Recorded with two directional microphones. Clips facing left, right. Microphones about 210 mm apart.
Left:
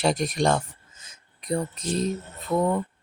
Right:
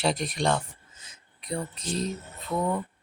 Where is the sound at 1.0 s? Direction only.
45° left (ahead or behind).